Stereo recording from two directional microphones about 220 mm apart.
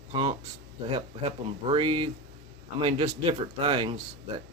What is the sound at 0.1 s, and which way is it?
Speech, 20° right (ahead or behind).